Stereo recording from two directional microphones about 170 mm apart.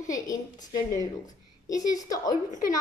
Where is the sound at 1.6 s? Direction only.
20° left (ahead or behind).